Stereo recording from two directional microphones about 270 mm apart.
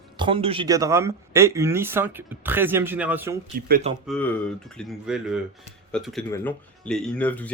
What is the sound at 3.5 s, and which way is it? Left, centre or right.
Speech, right.